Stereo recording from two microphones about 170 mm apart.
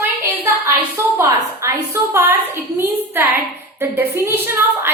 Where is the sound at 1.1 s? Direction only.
15° right (ahead or behind).